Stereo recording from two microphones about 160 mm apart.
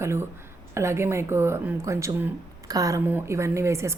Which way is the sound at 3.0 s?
10° right (ahead or behind).